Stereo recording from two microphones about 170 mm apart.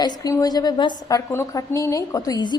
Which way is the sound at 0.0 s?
20° left (ahead or behind).